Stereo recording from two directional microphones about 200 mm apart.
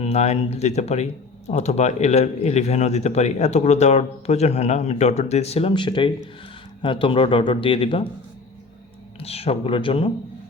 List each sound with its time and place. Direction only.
0.0 s speech: 35° left (ahead or behind)
9.2 s speech: 30° left (ahead or behind)